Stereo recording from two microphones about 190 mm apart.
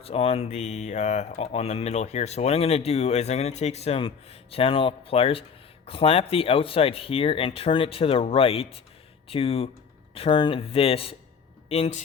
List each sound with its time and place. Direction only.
0.0 s speech: 30° left (ahead or behind)